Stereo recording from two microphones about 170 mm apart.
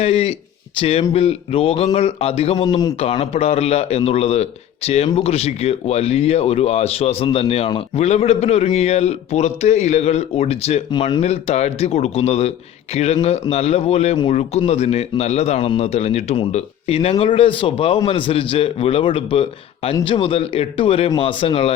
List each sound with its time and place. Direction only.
0.0 s a man's voice: 35° left (ahead or behind)
2.6 s a man's voice: 25° left (ahead or behind)
3.0 s a man's voice: 35° left (ahead or behind)